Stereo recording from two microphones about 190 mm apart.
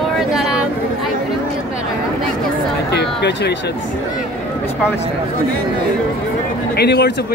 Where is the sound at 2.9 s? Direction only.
60° left (ahead or behind).